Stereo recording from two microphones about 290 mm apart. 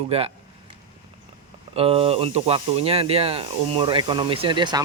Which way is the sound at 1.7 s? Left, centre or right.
Centre.